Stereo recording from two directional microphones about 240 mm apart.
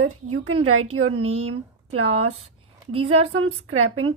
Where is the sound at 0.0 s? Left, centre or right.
Right.